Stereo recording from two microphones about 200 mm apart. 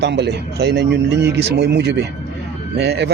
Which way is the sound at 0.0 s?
60° right (ahead or behind).